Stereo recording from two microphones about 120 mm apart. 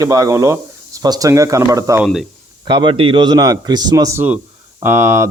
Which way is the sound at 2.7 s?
45° right (ahead or behind).